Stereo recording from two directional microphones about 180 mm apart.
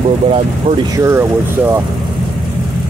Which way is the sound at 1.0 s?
15° right (ahead or behind).